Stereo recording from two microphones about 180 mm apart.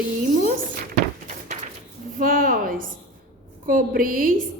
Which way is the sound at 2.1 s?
50° right (ahead or behind).